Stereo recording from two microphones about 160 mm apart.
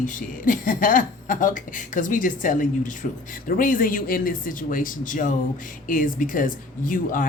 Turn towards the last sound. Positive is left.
turn(degrees=55)  # may be behind; listen again after turning